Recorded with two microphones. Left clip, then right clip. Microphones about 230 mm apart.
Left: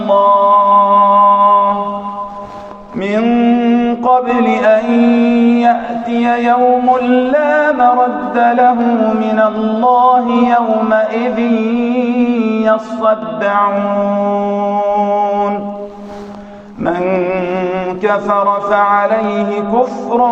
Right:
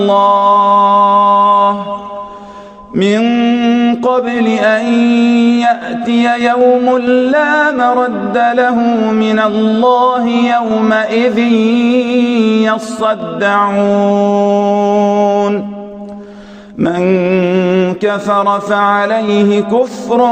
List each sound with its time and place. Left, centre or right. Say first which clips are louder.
0.1 s music: left 1 dB; right
3.0 s music: right 1 dB; right
16.8 s music: right 2 dB; right